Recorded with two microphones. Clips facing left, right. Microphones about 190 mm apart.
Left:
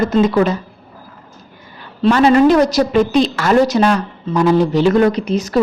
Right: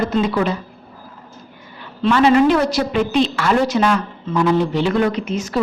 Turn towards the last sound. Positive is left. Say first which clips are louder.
# left 5 dB
turn(degrees=35)  # may be behind; listen again after turning